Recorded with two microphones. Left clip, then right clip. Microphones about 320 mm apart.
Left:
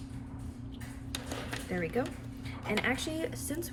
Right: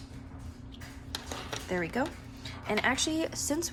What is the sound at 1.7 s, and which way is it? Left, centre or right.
A woman's voice, centre.